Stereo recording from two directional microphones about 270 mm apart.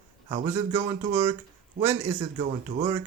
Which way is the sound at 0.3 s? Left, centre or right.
Centre.